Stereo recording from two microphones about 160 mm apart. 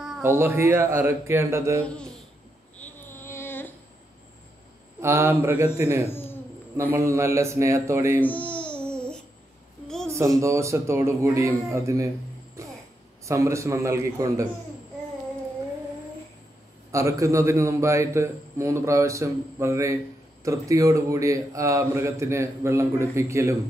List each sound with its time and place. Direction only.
0.2 s a man's voice: 15° right (ahead or behind)
2.8 s a sound: 15° left (ahead or behind)
5.0 s a man's voice: 15° right (ahead or behind)
6.0 s speech: 15° left (ahead or behind)
6.8 s a man's voice: 15° right (ahead or behind)
8.2 s babbling: 10° left (ahead or behind)
10.0 s a sound: 15° right (ahead or behind)
10.4 s a man's voice: 20° right (ahead or behind)
13.2 s a man's voice: 20° right (ahead or behind)
16.9 s a man's voice: 20° right (ahead or behind)